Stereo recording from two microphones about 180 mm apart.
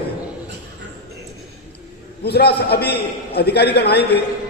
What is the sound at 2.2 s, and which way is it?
A man's voice, 65° left (ahead or behind).